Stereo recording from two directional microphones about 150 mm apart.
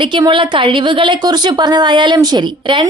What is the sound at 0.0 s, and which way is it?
A woman's voice, 30° right (ahead or behind).